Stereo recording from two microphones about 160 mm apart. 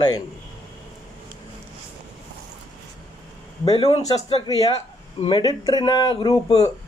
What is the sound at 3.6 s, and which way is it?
Speech, 35° left (ahead or behind).